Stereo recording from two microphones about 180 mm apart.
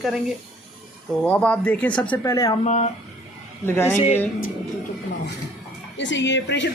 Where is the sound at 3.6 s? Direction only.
15° left (ahead or behind).